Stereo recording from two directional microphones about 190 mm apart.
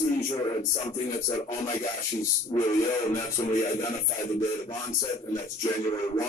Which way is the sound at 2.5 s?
15° left (ahead or behind).